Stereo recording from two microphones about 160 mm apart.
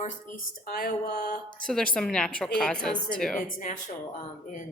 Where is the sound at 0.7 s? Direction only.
70° left (ahead or behind).